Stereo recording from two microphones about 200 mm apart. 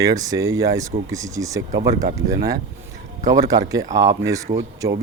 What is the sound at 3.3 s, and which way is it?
Speech, 20° right (ahead or behind).